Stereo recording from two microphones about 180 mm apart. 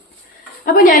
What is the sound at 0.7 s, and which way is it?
Speech, 50° left (ahead or behind).